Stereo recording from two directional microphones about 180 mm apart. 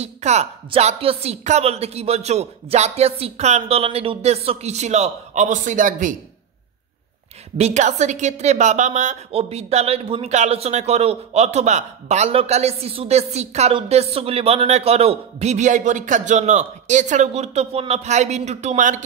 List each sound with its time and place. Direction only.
0.0 s a woman's voice: 40° right (ahead or behind)
7.5 s a woman's voice: 40° right (ahead or behind)